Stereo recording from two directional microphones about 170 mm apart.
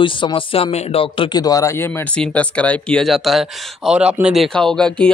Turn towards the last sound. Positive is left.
turn(degrees=5)  # may be behind; listen again after turning